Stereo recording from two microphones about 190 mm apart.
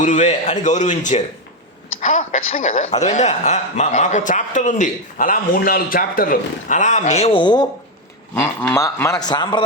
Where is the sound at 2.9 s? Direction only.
40° left (ahead or behind); by 7.7 s 25° left (ahead or behind).